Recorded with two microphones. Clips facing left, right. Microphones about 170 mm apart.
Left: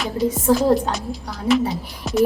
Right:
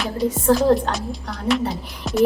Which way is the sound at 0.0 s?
Centre (ahead or behind).